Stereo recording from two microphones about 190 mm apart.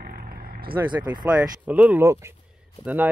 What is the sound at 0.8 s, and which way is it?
Speech, 20° right (ahead or behind).